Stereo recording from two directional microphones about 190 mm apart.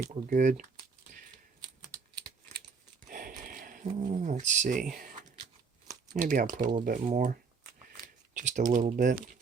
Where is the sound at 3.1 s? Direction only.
45° right (ahead or behind).